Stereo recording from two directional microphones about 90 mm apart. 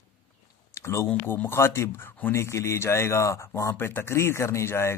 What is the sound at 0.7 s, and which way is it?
Speech, 35° left (ahead or behind).